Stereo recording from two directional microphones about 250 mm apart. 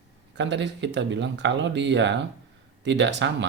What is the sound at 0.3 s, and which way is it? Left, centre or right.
Speech, right.